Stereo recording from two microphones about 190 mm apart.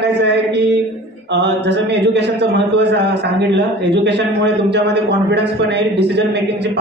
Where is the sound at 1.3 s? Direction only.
65° right (ahead or behind).